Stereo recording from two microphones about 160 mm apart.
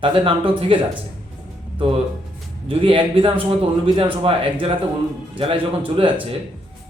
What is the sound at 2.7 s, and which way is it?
A man's voice, 35° right (ahead or behind).